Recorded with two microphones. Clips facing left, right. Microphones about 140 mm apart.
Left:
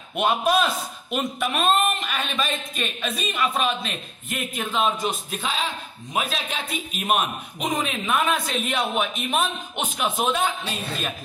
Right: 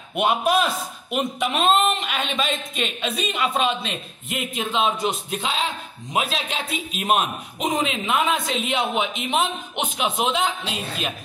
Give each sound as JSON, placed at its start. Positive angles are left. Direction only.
{"t": 0.1, "sound": "a man's voice", "side_deg": -10}